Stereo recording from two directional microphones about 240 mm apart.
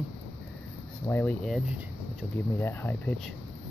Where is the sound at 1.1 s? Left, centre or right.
Centre.